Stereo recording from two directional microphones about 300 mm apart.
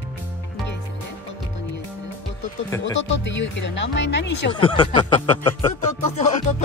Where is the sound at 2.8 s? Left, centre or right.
Left.